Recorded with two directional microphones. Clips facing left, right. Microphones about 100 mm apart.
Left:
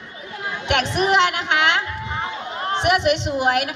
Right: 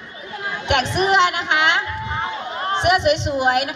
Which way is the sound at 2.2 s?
35° right (ahead or behind).